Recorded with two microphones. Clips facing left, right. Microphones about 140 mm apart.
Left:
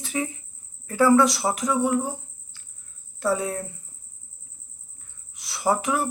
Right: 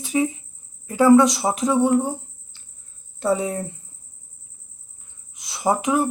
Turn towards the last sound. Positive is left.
turn(degrees=-20)  # may be behind; listen again after turning